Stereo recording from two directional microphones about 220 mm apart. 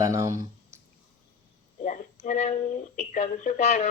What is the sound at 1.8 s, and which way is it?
Speech, 35° left (ahead or behind).